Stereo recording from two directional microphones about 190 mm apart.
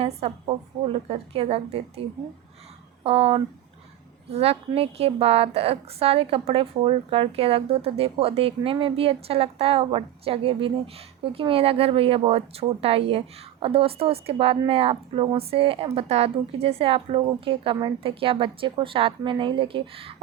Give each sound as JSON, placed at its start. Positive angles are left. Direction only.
{"t": 0.0, "sound": "a woman's voice", "side_deg": -30}
{"t": 3.0, "sound": "a woman's voice", "side_deg": -30}